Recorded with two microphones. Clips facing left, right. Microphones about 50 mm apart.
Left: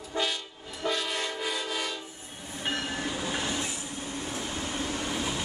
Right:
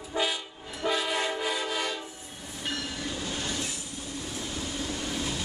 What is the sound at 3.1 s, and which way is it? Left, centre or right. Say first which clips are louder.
Train: left 2 dB; left.